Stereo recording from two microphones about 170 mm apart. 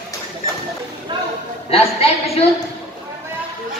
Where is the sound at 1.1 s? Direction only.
30° right (ahead or behind).